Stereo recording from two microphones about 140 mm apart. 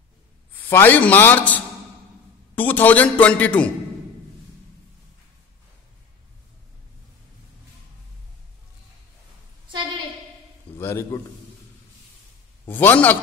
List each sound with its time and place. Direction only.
0.6 s a man's voice: 15° left (ahead or behind)
10.8 s a man's voice: 20° left (ahead or behind)
12.6 s a man's voice: 15° left (ahead or behind)